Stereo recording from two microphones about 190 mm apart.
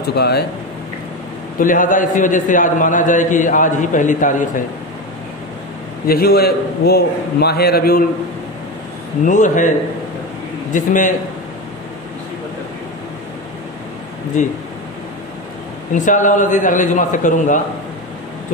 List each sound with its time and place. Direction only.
0.1 s a man's voice: 60° left (ahead or behind)
1.6 s a man's voice: 45° left (ahead or behind)
6.0 s a man's voice: 55° left (ahead or behind)
9.2 s a man's voice: 40° left (ahead or behind)
10.7 s a man's voice: 40° left (ahead or behind)
15.9 s a man's voice: 40° left (ahead or behind)